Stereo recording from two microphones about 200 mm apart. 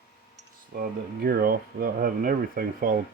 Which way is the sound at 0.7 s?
45° right (ahead or behind).